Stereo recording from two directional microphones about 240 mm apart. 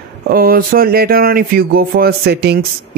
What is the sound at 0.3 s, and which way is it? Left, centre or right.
Speech, right.